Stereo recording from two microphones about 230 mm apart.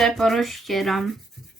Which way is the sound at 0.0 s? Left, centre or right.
Centre.